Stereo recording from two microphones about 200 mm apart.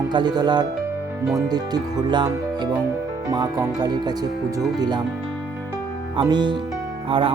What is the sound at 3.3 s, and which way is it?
Music, 20° right (ahead or behind).